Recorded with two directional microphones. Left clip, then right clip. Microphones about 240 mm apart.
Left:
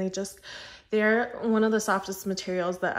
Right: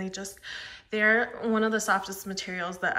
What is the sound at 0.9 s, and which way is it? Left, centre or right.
Speech, left.